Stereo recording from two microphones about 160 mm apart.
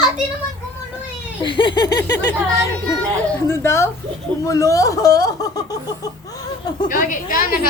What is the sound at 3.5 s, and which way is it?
Speech, 15° left (ahead or behind).